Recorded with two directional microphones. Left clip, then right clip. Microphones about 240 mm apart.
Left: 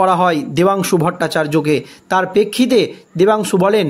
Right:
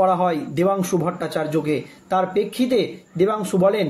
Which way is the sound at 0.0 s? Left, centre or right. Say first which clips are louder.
Left 5 dB; left.